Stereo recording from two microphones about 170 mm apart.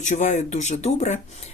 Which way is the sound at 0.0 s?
45° left (ahead or behind).